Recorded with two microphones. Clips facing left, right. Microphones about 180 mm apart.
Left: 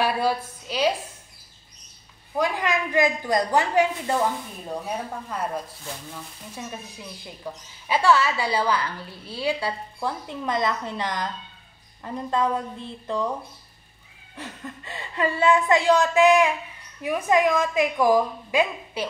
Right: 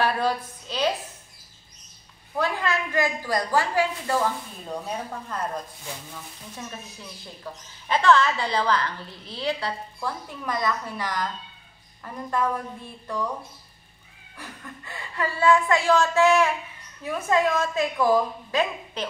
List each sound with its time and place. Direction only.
0.0 s a woman's voice: 10° left (ahead or behind)
2.3 s a woman's voice: 15° left (ahead or behind)
14.3 s a woman's voice: 20° left (ahead or behind)